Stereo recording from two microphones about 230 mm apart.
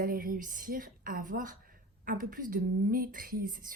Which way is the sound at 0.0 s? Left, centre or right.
Right.